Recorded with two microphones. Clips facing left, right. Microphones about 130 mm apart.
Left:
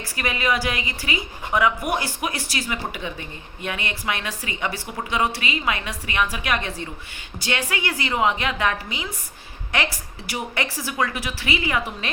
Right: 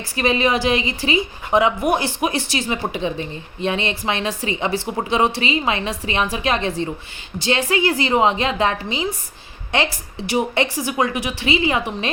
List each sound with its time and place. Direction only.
0.2 s a woman's voice: 25° right (ahead or behind)